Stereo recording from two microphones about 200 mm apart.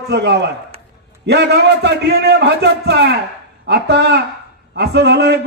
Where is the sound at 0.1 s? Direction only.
55° right (ahead or behind).